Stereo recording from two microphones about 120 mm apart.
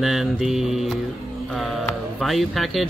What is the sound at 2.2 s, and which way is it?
Speech, centre (ahead or behind).